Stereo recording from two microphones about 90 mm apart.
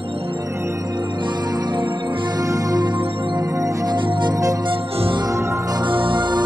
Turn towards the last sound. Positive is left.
turn(degrees=-55)  # may be behind; listen again after turning